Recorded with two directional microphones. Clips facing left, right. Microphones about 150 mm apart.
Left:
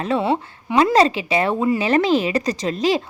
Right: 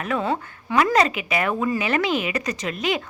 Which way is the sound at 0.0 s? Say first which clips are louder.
Left 4 dB; 30° left (ahead or behind).